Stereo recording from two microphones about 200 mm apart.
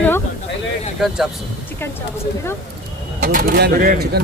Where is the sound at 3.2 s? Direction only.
45° right (ahead or behind).